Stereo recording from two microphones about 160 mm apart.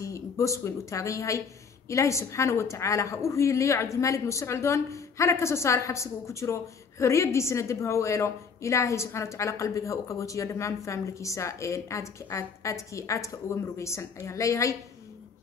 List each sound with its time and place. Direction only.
0.0 s a woman's voice: 20° left (ahead or behind)